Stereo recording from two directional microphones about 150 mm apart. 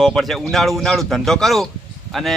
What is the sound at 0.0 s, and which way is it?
Speech, centre (ahead or behind).